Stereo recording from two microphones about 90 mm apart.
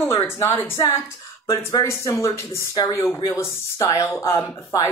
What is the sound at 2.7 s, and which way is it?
Speech, 50° left (ahead or behind).